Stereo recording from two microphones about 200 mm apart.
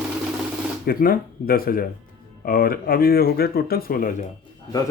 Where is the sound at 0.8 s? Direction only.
50° left (ahead or behind).